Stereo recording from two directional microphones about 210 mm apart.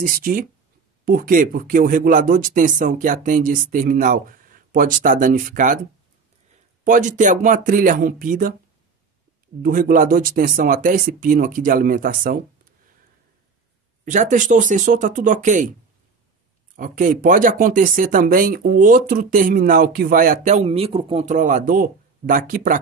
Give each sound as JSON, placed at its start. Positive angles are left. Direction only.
{"t": 0.0, "sound": "speech", "side_deg": -40}
{"t": 9.6, "sound": "speech", "side_deg": -40}
{"t": 14.0, "sound": "speech", "side_deg": -35}
{"t": 16.7, "sound": "speech", "side_deg": -40}